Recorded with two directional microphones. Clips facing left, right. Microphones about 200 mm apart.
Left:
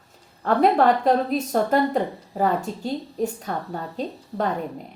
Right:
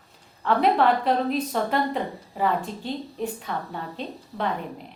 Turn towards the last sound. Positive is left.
turn(degrees=40)  # may be behind; listen again after turning